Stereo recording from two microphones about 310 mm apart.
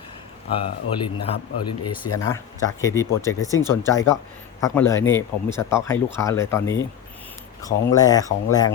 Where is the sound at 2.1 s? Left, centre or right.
Centre.